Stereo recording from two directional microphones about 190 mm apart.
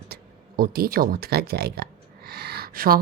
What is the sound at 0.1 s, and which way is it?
Speech, 50° right (ahead or behind).